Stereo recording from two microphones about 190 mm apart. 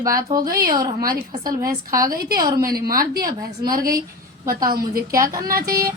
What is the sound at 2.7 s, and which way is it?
A woman's voice, 50° right (ahead or behind).